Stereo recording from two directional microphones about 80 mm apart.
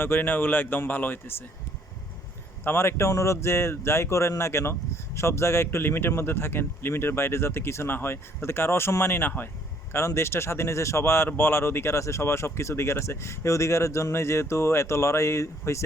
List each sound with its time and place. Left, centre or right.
0.0 s speech: left
2.6 s speech: left